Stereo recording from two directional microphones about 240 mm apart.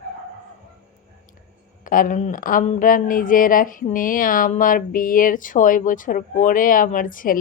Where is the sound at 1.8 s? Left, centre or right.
Left.